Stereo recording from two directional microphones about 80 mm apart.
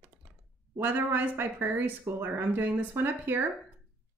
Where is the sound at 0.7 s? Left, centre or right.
Right.